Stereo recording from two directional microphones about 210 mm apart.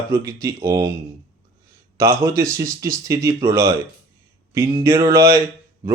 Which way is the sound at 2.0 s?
15° right (ahead or behind).